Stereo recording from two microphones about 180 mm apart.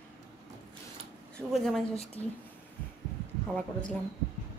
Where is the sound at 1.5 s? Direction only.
Centre (ahead or behind).